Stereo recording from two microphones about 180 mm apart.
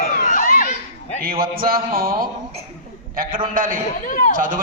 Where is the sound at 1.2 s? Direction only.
55° right (ahead or behind).